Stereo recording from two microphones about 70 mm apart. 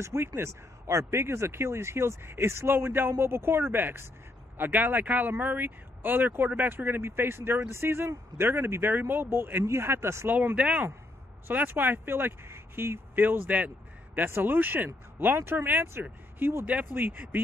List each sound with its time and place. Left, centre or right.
0.0 s speech: right
10.2 s speech: right
11.4 s speech: right